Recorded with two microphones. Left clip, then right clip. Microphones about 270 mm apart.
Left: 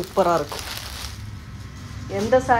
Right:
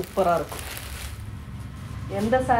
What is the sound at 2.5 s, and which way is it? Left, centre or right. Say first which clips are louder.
Speech: left 2 dB; left.